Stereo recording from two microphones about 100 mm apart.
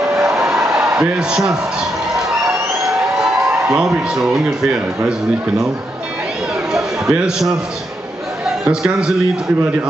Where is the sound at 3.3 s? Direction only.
30° right (ahead or behind).